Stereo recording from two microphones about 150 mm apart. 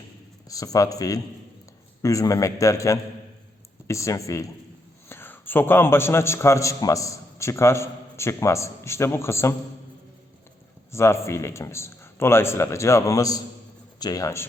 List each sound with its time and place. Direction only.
0.4 s a man's voice: 25° left (ahead or behind)
10.9 s speech: 20° left (ahead or behind)